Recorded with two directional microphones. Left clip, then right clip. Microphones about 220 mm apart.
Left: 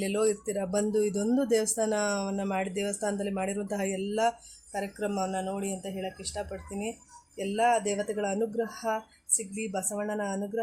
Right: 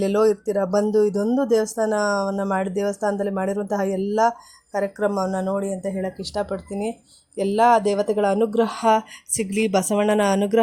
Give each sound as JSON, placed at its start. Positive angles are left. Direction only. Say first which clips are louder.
{"t": 0.0, "sound": "speech", "louder": "right 9 dB", "side_deg": -20}